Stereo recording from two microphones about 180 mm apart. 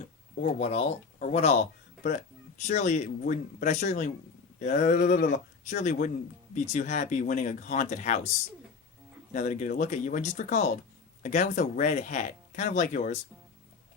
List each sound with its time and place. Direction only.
0.3 s speech: 45° left (ahead or behind)
2.6 s speech: 40° left (ahead or behind)
9.3 s speech: 45° left (ahead or behind)